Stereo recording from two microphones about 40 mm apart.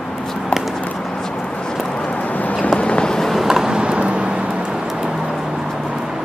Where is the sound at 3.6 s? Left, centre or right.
Right.